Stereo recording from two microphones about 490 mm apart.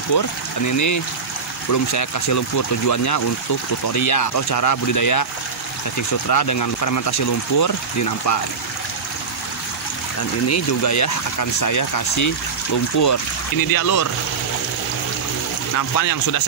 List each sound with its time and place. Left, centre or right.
0.1 s speech: left
10.5 s speech: left
15.7 s speech: left